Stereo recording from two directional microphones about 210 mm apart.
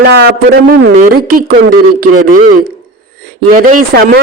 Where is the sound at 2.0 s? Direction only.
45° right (ahead or behind).